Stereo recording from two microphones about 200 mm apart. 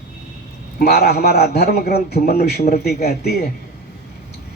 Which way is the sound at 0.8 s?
50° left (ahead or behind).